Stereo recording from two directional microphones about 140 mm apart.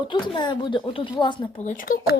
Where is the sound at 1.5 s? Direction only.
60° left (ahead or behind).